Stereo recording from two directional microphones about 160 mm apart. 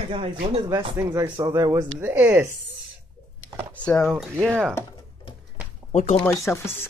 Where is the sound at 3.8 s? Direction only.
10° left (ahead or behind).